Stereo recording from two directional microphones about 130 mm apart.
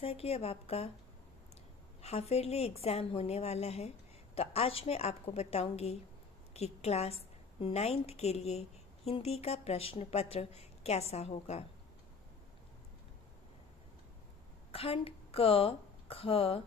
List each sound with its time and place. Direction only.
0.0 s a woman's voice: 50° left (ahead or behind)
2.0 s a woman's voice: 55° left (ahead or behind)
14.7 s speech: 50° left (ahead or behind)